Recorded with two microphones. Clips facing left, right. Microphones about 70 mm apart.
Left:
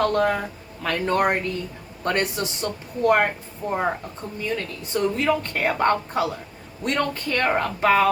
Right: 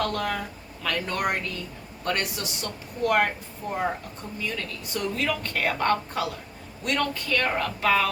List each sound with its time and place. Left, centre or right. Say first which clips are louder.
0.0 s a sound: left 7 dB; left
0.8 s a man's voice: left 6 dB; left
4.4 s a man's voice: left 5 dB; left